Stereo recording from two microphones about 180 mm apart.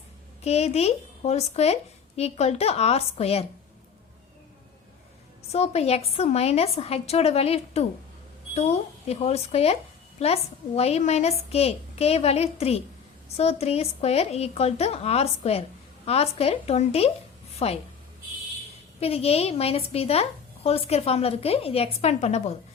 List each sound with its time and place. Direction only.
0.4 s speech: 35° left (ahead or behind)
5.5 s speech: 35° left (ahead or behind)
18.9 s speech: 35° left (ahead or behind)